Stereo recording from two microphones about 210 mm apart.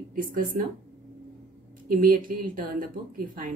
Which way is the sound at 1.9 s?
40° right (ahead or behind).